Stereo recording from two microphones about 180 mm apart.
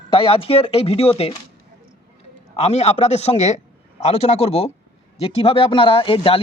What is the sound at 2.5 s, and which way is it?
A man's voice, 35° left (ahead or behind).